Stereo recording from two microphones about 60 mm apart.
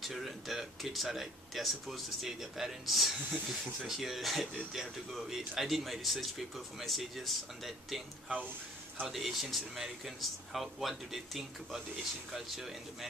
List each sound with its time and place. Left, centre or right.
0.0 s speech: centre
9.0 s speech: centre